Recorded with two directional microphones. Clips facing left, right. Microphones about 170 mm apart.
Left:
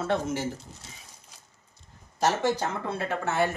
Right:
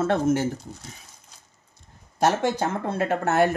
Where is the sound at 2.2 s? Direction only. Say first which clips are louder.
Right 3 dB; 55° right (ahead or behind).